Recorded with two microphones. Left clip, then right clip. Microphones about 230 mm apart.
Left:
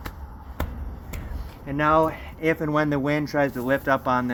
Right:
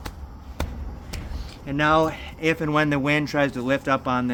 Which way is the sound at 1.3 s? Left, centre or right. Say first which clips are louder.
Right 1 dB; centre.